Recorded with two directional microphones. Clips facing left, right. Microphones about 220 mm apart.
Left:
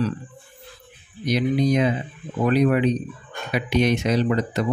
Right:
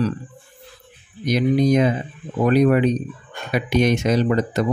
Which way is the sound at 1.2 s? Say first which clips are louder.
Right 3 dB; 45° right (ahead or behind).